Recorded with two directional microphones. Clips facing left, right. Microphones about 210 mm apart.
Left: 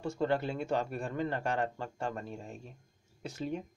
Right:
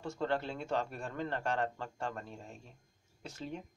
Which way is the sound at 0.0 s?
10° left (ahead or behind).